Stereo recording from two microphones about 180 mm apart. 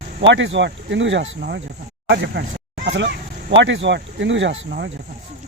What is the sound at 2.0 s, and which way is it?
Speech, 75° right (ahead or behind).